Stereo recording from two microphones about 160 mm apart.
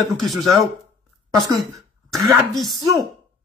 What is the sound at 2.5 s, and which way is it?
Speech, centre (ahead or behind).